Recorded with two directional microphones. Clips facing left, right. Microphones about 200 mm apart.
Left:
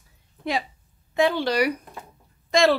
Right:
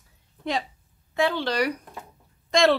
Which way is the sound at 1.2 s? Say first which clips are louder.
Left 3 dB; 15° left (ahead or behind).